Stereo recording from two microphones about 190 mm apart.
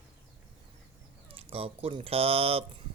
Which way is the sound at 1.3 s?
30° right (ahead or behind).